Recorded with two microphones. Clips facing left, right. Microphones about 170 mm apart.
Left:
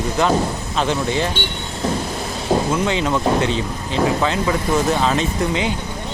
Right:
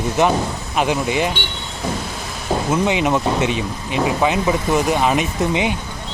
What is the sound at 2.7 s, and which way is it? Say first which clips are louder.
Speech: right 2 dB; 15° right (ahead or behind).